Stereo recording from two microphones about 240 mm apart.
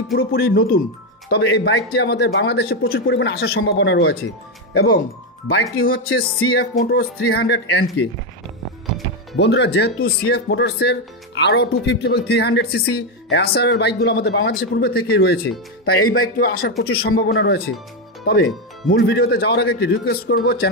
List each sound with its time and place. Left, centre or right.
0.1 s speech: left
5.5 s speech: left
5.9 s speech: left
9.4 s speech: left